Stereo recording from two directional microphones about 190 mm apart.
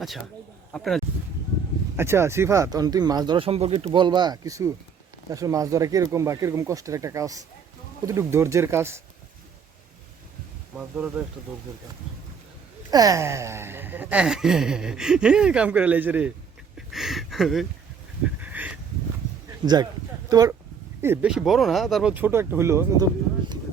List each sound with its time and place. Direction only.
0.7 s speech: 5° left (ahead or behind)
2.0 s speech: 15° right (ahead or behind)
10.8 s speech: 5° right (ahead or behind)
12.9 s speech: 20° right (ahead or behind); by 17.7 s centre (ahead or behind)
18.3 s a sound: 10° right (ahead or behind)
19.6 s speech: 20° right (ahead or behind)